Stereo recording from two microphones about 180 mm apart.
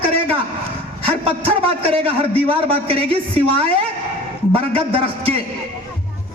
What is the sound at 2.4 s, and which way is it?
A man's voice, 30° right (ahead or behind).